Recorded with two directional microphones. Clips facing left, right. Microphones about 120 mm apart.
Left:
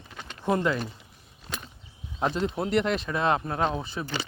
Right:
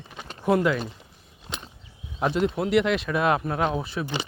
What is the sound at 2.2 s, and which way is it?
Speech, 5° right (ahead or behind).